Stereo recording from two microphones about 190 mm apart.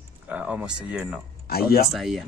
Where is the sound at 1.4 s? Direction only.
55° left (ahead or behind).